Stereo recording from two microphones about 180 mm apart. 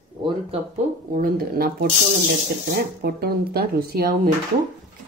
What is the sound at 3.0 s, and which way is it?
Speech, 60° right (ahead or behind).